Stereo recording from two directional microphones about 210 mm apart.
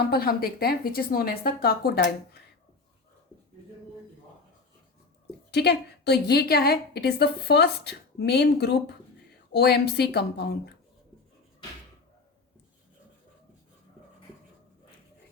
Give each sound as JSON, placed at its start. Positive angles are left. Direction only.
{"t": 0.1, "sound": "a woman's voice", "side_deg": 45}
{"t": 5.5, "sound": "a woman's voice", "side_deg": 50}